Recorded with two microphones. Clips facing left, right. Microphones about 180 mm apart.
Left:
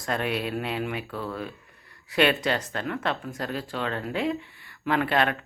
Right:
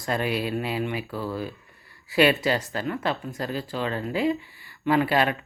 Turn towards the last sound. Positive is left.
turn(degrees=-5)  # may be behind; listen again after turning